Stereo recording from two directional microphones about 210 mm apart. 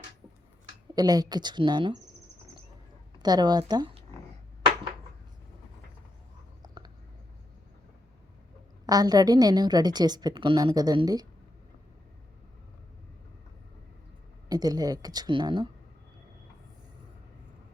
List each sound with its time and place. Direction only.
0.9 s a woman's voice: 20° right (ahead or behind)
3.2 s a woman's voice: 20° right (ahead or behind)
6.6 s a sound: 20° right (ahead or behind)
8.9 s a woman's voice: 20° right (ahead or behind)
14.5 s a woman's voice: 20° right (ahead or behind)